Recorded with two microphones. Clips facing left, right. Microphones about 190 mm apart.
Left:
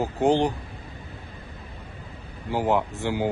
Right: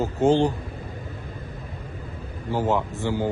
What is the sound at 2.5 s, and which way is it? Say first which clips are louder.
Speech: even; 15° left (ahead or behind).